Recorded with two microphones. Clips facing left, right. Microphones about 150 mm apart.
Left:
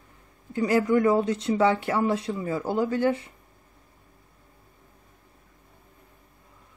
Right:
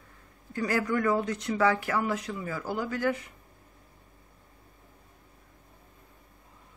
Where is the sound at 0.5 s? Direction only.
20° left (ahead or behind).